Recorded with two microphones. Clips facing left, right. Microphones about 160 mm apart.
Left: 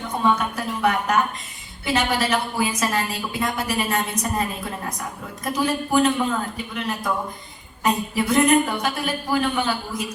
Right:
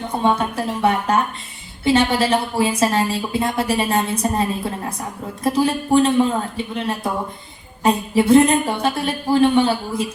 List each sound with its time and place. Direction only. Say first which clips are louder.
0.2 s a woman's voice: right 2 dB; 30° right (ahead or behind)